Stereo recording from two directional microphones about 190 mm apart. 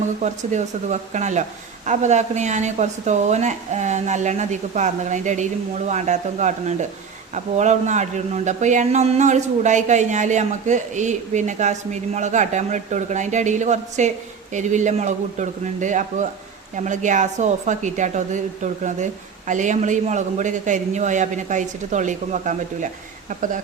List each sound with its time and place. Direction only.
0.2 s a man's voice: 40° right (ahead or behind)